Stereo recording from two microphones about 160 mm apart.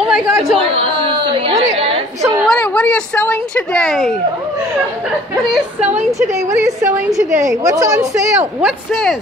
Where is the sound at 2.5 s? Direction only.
5° left (ahead or behind).